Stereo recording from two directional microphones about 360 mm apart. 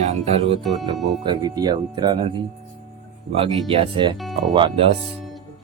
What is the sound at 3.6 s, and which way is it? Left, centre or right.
Speech, centre.